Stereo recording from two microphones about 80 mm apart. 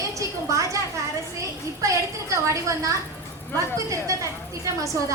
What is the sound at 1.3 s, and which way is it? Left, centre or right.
A woman's voice, right.